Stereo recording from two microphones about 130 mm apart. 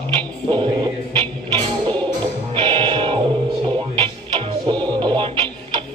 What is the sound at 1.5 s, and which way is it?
Music, 35° right (ahead or behind).